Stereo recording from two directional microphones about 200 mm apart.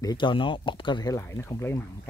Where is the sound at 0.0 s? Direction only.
20° left (ahead or behind).